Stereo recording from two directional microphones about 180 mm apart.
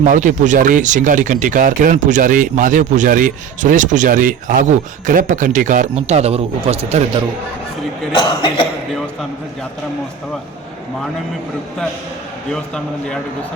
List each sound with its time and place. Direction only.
0.0 s speech: 45° right (ahead or behind)
8.1 s speech: 25° left (ahead or behind)
12.5 s a man's voice: 5° left (ahead or behind)